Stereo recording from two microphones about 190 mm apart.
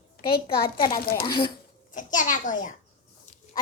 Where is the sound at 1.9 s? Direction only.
45° left (ahead or behind).